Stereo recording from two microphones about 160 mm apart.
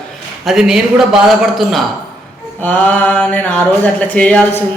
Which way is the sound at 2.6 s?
10° left (ahead or behind).